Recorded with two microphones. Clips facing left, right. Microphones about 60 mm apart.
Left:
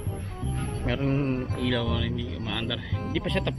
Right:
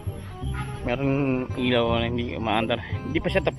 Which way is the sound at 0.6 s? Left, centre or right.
Centre.